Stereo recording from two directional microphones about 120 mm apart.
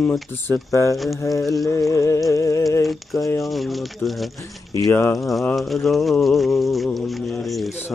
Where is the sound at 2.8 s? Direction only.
Centre (ahead or behind).